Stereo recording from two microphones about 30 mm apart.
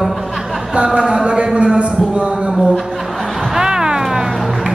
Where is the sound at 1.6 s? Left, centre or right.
Right.